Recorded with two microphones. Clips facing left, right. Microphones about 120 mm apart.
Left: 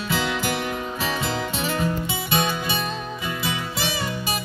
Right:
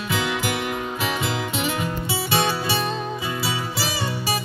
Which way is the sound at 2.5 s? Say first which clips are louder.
Right 2 dB; 30° right (ahead or behind).